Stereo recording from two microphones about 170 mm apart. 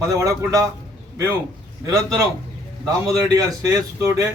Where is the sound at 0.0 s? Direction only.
20° right (ahead or behind).